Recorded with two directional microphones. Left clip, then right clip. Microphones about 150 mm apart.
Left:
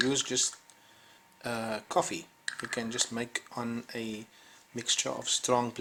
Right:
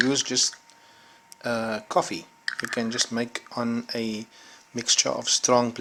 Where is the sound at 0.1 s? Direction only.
35° right (ahead or behind).